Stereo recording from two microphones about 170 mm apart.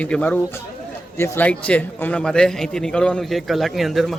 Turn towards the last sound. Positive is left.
turn(degrees=0)  # may be behind; listen again after turning